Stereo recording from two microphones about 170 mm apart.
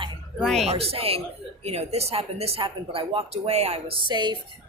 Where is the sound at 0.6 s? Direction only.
35° right (ahead or behind).